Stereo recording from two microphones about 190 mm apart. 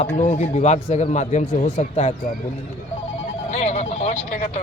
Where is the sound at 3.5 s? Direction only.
35° left (ahead or behind).